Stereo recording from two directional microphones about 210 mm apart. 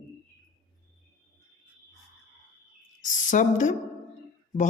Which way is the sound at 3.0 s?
35° left (ahead or behind).